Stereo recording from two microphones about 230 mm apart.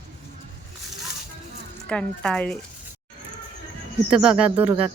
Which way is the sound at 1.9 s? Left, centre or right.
Centre.